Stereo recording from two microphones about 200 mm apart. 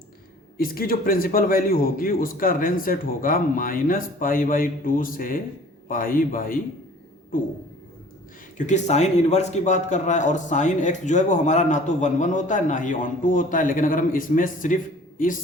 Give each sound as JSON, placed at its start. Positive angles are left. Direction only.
{"t": 0.5, "sound": "a man's voice", "side_deg": 45}
{"t": 8.5, "sound": "a man's voice", "side_deg": 35}